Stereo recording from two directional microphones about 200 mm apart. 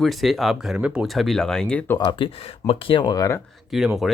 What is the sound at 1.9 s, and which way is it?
Speech, 20° left (ahead or behind).